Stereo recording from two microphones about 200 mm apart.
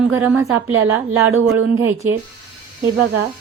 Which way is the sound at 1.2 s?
90° right.